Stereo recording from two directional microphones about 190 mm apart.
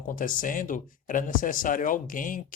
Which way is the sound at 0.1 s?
45° left (ahead or behind).